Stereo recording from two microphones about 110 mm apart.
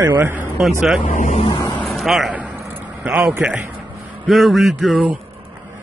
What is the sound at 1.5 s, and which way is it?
Speech, 40° left (ahead or behind).